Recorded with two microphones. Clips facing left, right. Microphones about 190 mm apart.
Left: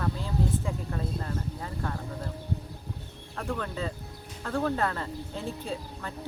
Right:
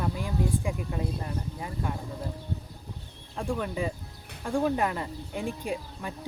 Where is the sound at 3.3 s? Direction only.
15° right (ahead or behind).